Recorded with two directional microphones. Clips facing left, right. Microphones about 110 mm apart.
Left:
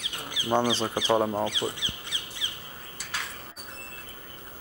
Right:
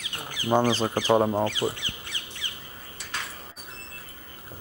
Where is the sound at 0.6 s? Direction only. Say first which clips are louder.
Right 3 dB; 5° left (ahead or behind).